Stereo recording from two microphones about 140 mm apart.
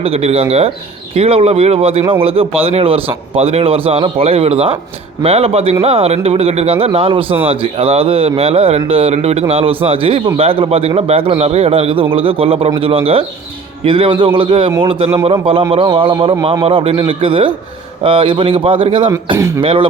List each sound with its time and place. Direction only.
0.0 s speech: 45° right (ahead or behind)
19.4 s speech: 20° right (ahead or behind)
19.6 s speech: 40° right (ahead or behind)